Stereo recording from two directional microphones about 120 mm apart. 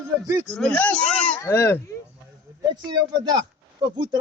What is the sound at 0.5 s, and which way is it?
Speech, 10° left (ahead or behind).